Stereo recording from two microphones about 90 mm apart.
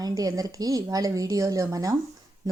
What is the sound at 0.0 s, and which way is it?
A woman's voice, 40° right (ahead or behind).